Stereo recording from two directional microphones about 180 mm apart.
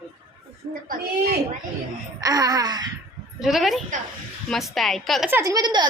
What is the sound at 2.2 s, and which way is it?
Wail, 20° right (ahead or behind).